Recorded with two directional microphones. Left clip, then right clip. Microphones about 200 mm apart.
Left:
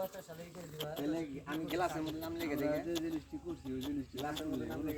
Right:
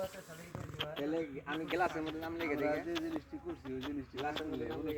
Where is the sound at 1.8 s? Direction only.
55° left (ahead or behind).